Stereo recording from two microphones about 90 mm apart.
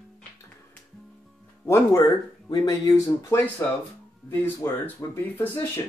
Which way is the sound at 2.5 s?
50° left (ahead or behind).